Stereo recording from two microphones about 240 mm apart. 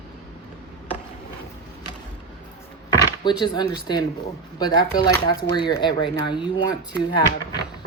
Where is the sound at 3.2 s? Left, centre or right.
Centre.